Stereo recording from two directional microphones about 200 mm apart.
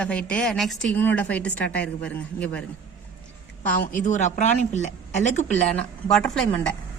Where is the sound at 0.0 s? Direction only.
5° left (ahead or behind).